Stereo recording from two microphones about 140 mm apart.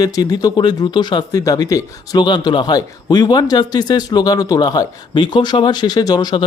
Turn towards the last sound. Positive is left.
turn(degrees=30)  # may be behind; listen again after turning